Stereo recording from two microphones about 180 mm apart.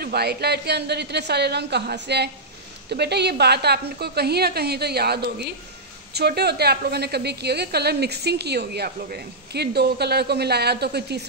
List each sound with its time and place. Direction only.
0.0 s a woman's voice: 60° right (ahead or behind)